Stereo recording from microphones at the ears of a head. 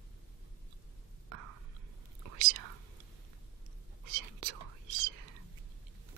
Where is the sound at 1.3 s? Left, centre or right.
Right.